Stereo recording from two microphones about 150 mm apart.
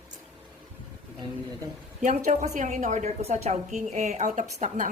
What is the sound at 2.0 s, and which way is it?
A woman's voice, 50° right (ahead or behind).